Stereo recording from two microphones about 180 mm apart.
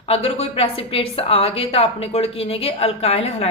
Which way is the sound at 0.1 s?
35° left (ahead or behind).